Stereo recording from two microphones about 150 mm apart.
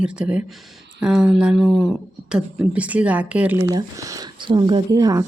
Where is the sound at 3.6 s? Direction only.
20° right (ahead or behind).